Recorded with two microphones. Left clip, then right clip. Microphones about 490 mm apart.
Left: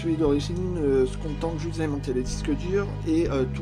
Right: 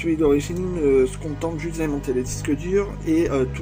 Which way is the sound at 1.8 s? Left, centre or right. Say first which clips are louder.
Right 4 dB; left.